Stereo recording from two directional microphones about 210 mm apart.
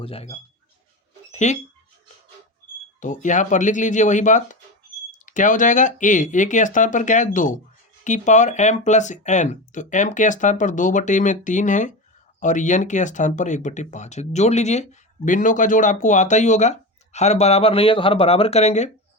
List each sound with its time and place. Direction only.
0.0 s speech: 30° left (ahead or behind)
1.3 s a sound: 35° left (ahead or behind)
3.0 s speech: 35° left (ahead or behind)